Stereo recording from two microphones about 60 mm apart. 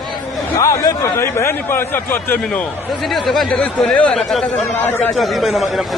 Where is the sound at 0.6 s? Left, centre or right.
Left.